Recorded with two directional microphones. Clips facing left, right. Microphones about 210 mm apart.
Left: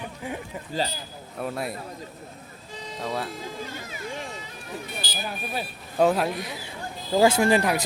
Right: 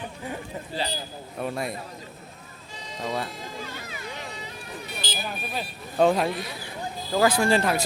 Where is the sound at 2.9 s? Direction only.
5° left (ahead or behind).